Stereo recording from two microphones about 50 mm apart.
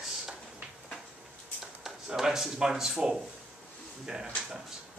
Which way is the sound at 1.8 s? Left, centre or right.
Centre.